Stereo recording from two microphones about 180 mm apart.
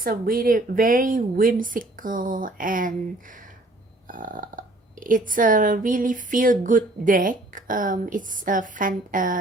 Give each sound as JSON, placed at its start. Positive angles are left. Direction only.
{"t": 0.0, "sound": "speech", "side_deg": -55}